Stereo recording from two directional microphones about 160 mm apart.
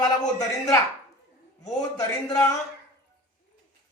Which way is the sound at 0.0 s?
25° left (ahead or behind).